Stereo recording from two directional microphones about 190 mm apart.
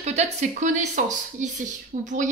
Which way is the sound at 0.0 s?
35° right (ahead or behind).